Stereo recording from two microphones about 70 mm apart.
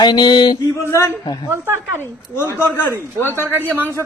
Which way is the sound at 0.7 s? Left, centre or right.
Left.